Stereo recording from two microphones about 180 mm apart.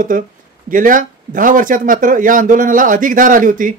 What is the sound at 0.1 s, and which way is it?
Speech, 50° right (ahead or behind).